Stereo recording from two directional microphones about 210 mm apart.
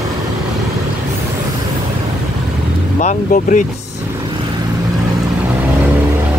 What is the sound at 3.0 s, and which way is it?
Speech, 35° left (ahead or behind).